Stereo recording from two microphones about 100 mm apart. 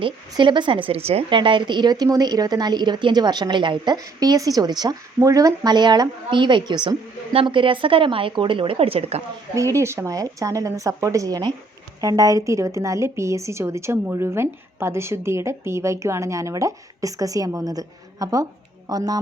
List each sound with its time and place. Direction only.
0.0 s a woman's voice: 55° right (ahead or behind); by 1.2 s 85° right
1.3 s a woman's voice: 55° right (ahead or behind); by 9.2 s 85° right
9.6 s a woman's voice: 30° right (ahead or behind)